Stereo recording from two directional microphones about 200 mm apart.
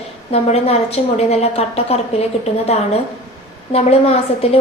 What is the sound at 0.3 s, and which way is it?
A woman's voice, 30° left (ahead or behind).